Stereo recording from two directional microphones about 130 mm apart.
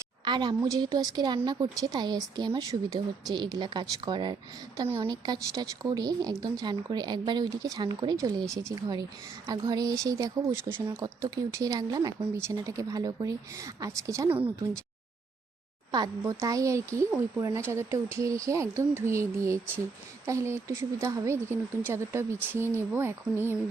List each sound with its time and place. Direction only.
0.3 s a woman's voice: 35° right (ahead or behind)
5.1 s a woman's voice: 30° right (ahead or behind)
15.9 s speech: 30° right (ahead or behind)